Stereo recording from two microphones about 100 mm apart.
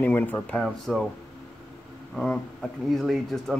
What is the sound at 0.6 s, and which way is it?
Speech, centre (ahead or behind).